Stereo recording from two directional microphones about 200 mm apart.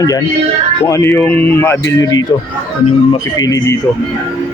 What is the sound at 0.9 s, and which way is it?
Speech, 15° left (ahead or behind).